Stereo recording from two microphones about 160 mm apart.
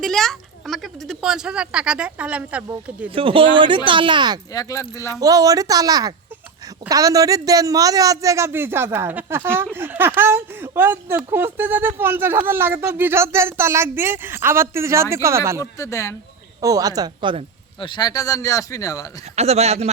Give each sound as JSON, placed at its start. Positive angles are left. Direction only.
{"t": 0.0, "sound": "a woman's voice", "side_deg": 5}
{"t": 3.2, "sound": "speech", "side_deg": -35}
{"t": 4.5, "sound": "speech", "side_deg": 20}
{"t": 5.2, "sound": "a woman's voice", "side_deg": -20}
{"t": 15.8, "sound": "speech", "side_deg": 20}
{"t": 16.6, "sound": "a woman's voice", "side_deg": -20}
{"t": 17.7, "sound": "speech", "side_deg": 30}
{"t": 19.4, "sound": "speech", "side_deg": -40}